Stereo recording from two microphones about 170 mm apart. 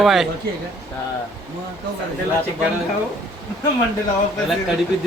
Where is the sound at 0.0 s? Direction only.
Centre (ahead or behind).